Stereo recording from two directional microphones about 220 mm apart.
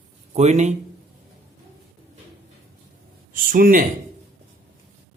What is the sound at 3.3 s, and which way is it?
Speech, 40° right (ahead or behind).